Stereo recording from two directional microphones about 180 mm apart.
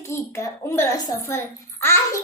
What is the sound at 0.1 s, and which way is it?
A child's voice, 15° left (ahead or behind).